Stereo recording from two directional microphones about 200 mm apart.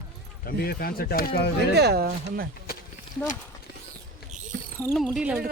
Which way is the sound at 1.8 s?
55° right (ahead or behind).